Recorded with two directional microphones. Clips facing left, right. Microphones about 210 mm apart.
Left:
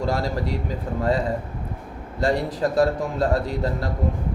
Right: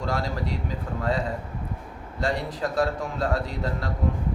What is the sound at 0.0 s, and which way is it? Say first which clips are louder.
Speech: left 4 dB; 35° left (ahead or behind).